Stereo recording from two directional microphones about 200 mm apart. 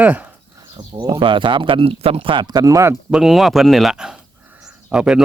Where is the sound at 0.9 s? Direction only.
25° right (ahead or behind).